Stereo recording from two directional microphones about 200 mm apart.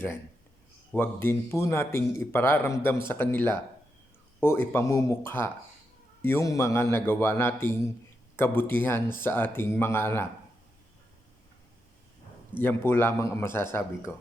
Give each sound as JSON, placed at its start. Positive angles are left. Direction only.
{"t": 0.9, "sound": "a man's voice", "side_deg": 10}
{"t": 12.5, "sound": "a man's voice", "side_deg": 10}